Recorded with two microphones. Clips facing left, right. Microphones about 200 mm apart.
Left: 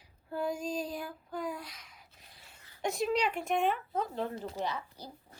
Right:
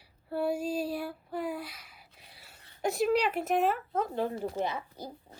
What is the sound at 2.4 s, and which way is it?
Speech, centre (ahead or behind).